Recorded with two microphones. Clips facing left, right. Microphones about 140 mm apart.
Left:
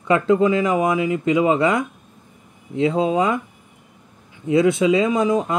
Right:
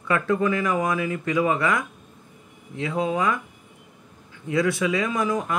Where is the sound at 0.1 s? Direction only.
20° left (ahead or behind).